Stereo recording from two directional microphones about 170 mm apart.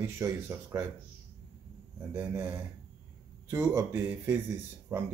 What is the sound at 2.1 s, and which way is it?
Speech, 10° right (ahead or behind).